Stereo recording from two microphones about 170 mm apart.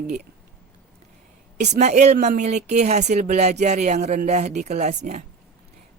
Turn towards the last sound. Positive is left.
turn(degrees=-45)  # may be behind; listen again after turning